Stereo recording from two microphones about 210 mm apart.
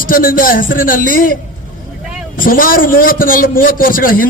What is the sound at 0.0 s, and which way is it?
A man's voice, 40° left (ahead or behind).